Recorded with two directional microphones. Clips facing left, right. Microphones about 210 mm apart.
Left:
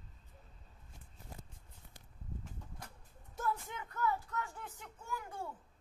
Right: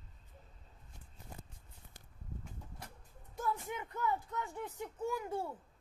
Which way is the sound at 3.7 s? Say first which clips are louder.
Even; 20° right (ahead or behind).